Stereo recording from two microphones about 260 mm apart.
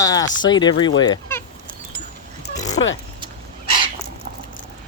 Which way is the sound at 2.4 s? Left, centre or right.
Left.